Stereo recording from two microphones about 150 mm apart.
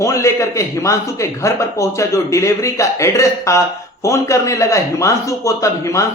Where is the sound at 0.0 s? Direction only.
20° left (ahead or behind).